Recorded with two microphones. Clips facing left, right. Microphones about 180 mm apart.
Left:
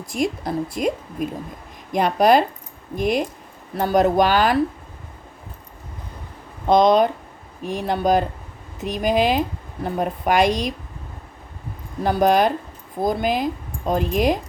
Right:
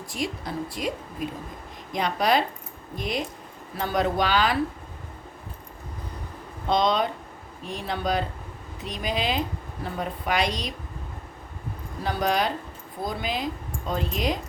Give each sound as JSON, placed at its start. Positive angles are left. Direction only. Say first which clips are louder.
{"t": 0.1, "sound": "speech", "louder": "left 8 dB", "side_deg": 45}
{"t": 6.7, "sound": "speech", "louder": "left 8 dB", "side_deg": 50}
{"t": 12.0, "sound": "speech", "louder": "left 8 dB", "side_deg": 50}